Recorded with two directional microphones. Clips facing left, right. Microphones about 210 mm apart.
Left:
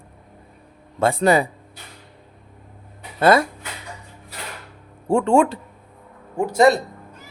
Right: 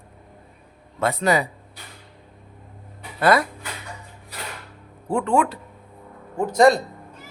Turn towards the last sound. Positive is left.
turn(degrees=5)  # may be behind; listen again after turning